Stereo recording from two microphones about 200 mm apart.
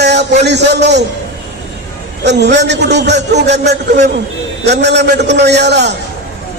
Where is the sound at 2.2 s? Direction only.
60° right (ahead or behind).